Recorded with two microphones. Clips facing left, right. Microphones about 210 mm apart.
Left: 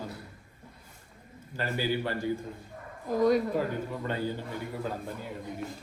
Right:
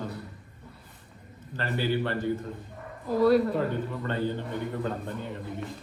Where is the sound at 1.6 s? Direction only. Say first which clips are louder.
Right 2 dB; 10° left (ahead or behind).